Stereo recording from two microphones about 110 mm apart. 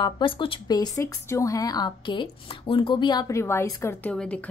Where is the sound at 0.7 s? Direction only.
30° left (ahead or behind).